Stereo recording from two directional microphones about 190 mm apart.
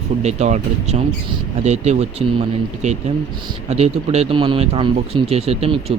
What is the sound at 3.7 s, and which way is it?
A man's voice, 35° right (ahead or behind).